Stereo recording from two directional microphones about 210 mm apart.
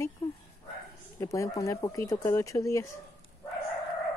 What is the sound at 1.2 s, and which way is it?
Speech, 15° left (ahead or behind).